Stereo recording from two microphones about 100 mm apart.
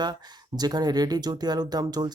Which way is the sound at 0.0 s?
40° right (ahead or behind).